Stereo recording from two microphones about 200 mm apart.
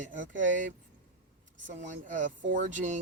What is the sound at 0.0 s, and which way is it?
Speech, 40° right (ahead or behind).